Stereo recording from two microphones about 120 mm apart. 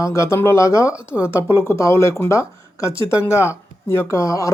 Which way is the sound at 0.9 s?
10° right (ahead or behind).